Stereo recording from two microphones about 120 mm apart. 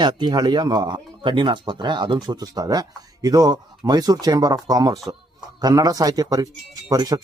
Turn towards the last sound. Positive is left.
turn(degrees=-30)  # may be behind; listen again after turning